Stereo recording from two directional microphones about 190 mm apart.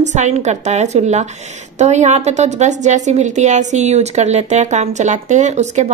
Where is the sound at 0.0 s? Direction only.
40° right (ahead or behind).